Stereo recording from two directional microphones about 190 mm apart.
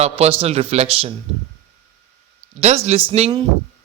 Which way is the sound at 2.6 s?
35° right (ahead or behind).